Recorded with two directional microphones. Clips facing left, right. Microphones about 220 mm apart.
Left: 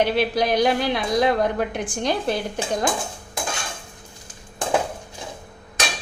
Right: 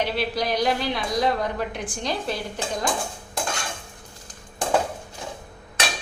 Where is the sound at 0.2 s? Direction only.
50° left (ahead or behind).